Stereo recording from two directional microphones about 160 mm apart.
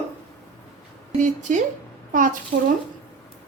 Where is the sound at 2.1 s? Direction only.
55° right (ahead or behind).